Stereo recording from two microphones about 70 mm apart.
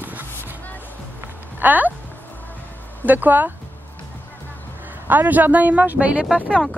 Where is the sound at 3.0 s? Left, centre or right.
Right.